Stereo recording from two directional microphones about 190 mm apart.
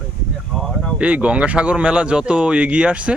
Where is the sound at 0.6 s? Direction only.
Centre (ahead or behind).